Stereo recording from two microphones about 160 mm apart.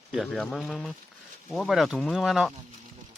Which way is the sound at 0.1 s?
Centre (ahead or behind).